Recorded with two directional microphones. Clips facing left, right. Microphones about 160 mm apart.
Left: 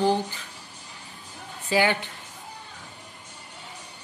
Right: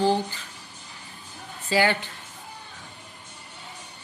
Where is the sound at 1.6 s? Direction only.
15° left (ahead or behind).